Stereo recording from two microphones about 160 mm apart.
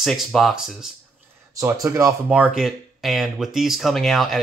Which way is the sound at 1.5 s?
20° right (ahead or behind).